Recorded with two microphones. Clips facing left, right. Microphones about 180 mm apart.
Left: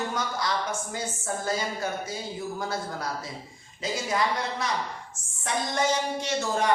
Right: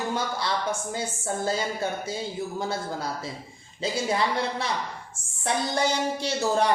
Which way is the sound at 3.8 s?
30° right (ahead or behind).